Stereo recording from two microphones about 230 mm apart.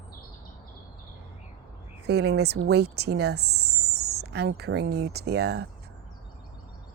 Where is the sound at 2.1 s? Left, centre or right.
Right.